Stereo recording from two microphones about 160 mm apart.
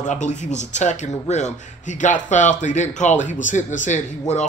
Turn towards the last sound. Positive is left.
turn(degrees=50)  # may be behind; listen again after turning